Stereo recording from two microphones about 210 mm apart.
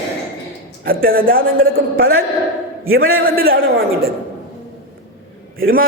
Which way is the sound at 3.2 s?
45° right (ahead or behind).